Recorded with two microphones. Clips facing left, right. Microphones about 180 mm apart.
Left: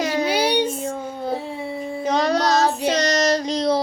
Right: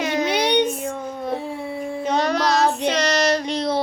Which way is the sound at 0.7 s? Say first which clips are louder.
Even; 30° left (ahead or behind).